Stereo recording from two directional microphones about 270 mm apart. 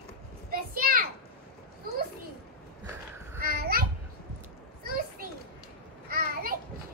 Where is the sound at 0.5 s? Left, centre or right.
Right.